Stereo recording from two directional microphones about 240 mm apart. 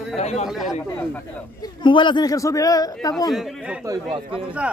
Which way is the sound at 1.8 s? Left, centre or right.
Centre.